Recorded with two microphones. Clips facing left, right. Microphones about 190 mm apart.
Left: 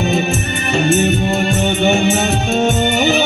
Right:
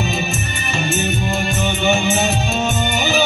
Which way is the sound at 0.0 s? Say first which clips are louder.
Left 6 dB; 55° left (ahead or behind).